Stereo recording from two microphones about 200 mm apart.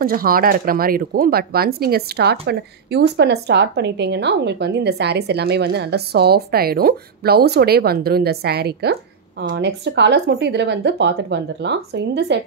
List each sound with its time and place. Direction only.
0.0 s speech: 45° right (ahead or behind)